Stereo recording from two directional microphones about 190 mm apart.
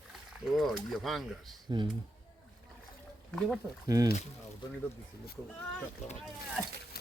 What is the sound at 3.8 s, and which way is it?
Speech, 20° right (ahead or behind).